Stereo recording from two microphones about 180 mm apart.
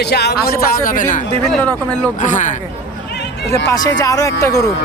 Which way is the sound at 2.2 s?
45° left (ahead or behind).